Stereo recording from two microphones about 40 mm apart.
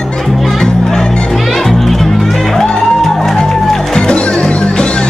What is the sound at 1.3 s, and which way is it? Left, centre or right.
Music, centre.